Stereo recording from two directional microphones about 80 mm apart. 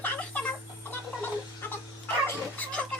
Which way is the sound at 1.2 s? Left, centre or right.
Left.